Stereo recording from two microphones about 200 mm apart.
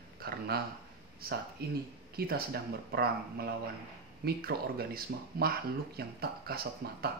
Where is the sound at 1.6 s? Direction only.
50° right (ahead or behind).